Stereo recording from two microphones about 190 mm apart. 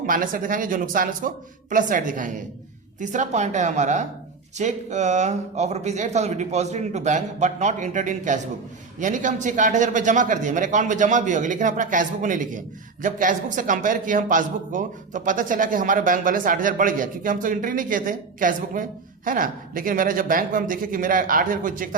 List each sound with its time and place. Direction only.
0.0 s a man's voice: 45° right (ahead or behind)